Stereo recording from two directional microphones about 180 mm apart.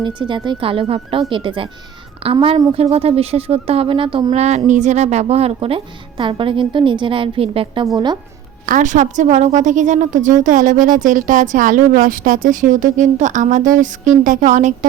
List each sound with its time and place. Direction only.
0.0 s a woman's voice: 25° right (ahead or behind)
8.6 s a woman's voice: 45° right (ahead or behind)